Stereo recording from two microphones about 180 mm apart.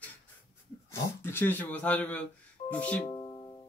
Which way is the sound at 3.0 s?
25° left (ahead or behind).